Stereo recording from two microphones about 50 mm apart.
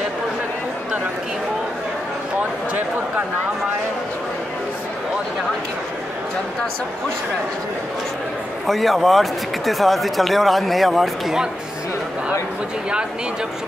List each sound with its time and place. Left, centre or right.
8.6 s speech: centre